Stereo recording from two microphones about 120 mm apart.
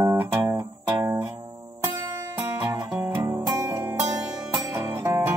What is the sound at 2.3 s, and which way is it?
Music, 15° right (ahead or behind).